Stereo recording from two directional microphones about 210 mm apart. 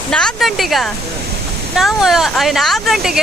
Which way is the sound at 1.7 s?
Centre (ahead or behind).